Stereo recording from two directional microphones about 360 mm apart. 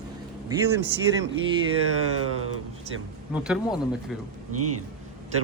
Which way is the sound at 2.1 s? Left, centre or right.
Right.